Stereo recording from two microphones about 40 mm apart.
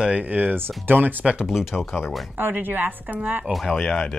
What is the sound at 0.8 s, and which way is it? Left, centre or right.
Speech, right.